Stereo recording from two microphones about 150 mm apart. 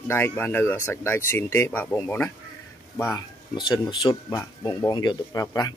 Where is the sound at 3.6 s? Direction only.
30° left (ahead or behind).